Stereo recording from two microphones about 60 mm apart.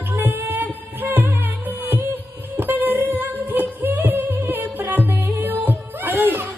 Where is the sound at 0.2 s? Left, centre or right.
Right.